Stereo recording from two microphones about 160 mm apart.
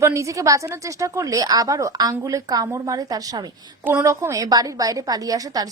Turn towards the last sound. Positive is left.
turn(degrees=-20)  # may be behind; listen again after turning